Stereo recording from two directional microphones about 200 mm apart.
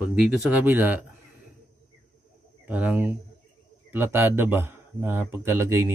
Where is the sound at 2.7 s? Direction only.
10° right (ahead or behind).